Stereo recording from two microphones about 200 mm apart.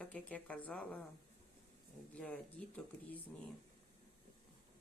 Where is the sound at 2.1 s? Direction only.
5° left (ahead or behind).